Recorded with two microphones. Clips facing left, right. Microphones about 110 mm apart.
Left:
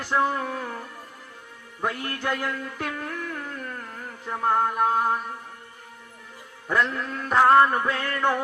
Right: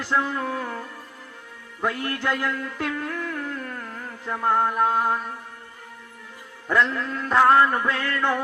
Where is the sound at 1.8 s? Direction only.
15° left (ahead or behind).